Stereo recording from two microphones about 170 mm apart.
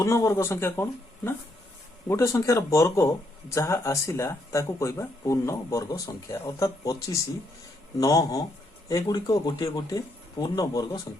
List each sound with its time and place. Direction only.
0.0 s speech: 15° left (ahead or behind)